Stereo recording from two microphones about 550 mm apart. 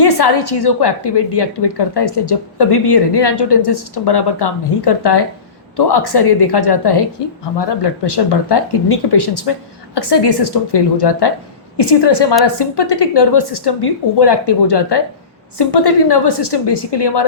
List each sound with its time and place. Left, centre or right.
0.0 s a woman's voice: left